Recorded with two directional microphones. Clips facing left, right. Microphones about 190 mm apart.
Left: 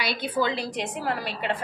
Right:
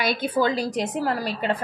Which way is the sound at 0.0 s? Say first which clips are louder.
Right 4 dB; 45° right (ahead or behind).